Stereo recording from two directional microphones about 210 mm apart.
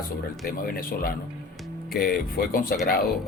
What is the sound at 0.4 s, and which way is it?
Speech, 45° left (ahead or behind).